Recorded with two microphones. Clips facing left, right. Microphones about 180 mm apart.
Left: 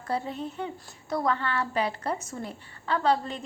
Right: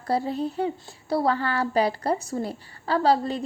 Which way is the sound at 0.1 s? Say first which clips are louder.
Right 6 dB; 35° right (ahead or behind).